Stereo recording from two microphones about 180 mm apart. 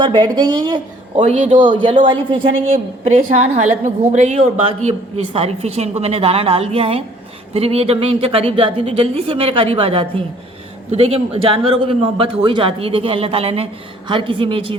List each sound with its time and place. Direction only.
0.0 s a woman's voice: 25° right (ahead or behind)